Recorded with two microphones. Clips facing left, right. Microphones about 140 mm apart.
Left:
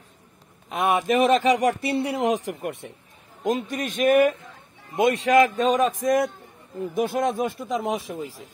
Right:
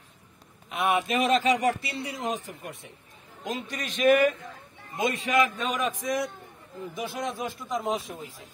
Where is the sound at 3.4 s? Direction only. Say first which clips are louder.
Left 8 dB; 50° left (ahead or behind).